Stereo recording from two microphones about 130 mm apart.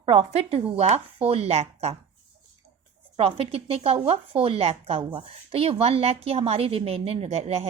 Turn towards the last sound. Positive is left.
turn(degrees=-55)  # may be behind; listen again after turning